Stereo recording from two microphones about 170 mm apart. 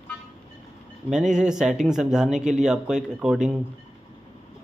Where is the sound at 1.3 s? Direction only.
5° right (ahead or behind).